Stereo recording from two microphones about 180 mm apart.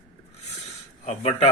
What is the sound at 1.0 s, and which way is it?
Speech, 35° left (ahead or behind).